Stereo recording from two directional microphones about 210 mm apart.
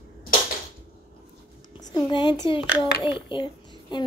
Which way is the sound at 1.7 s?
20° left (ahead or behind).